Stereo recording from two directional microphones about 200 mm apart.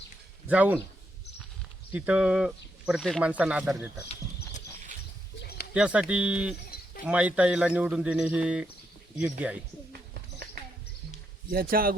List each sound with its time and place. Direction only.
0.4 s speech: 10° right (ahead or behind)
1.9 s speech: 5° right (ahead or behind)
5.4 s a sound: 50° left (ahead or behind)
5.7 s speech: 5° right (ahead or behind)
11.5 s speech: 45° right (ahead or behind)